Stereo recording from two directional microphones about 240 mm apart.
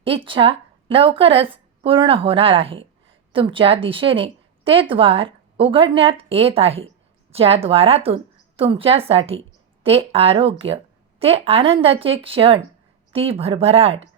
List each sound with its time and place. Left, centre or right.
0.3 s a woman's voice: right